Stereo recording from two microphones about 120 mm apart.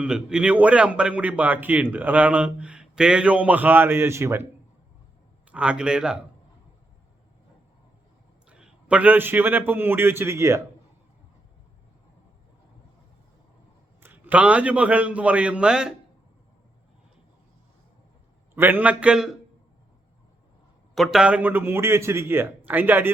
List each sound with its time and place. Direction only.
0.0 s a man's voice: 5° right (ahead or behind)
5.5 s a man's voice: 10° right (ahead or behind)
8.4 s a man's voice: 10° right (ahead or behind)
14.0 s a man's voice: 15° right (ahead or behind)
18.5 s a man's voice: 15° right (ahead or behind)
20.9 s a man's voice: centre (ahead or behind); by 23.1 s 15° right (ahead or behind)